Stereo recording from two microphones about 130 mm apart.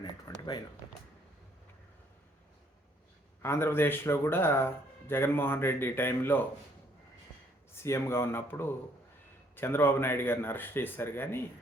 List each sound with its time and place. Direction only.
0.0 s a sound: 30° left (ahead or behind)
3.4 s speech: 20° left (ahead or behind)
7.8 s speech: 20° left (ahead or behind)